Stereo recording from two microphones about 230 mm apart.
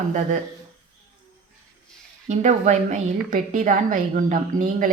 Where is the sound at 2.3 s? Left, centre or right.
Right.